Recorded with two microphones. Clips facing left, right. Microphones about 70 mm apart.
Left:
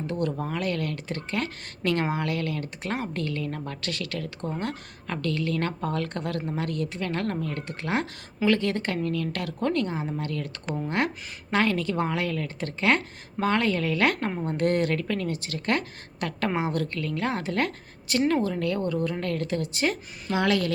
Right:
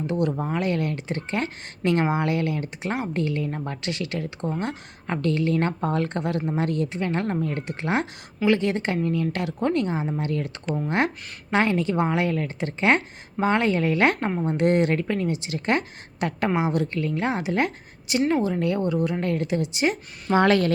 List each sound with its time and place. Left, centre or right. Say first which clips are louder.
0.1 s speech: right 4 dB; centre
20.3 s speech: right 5 dB; right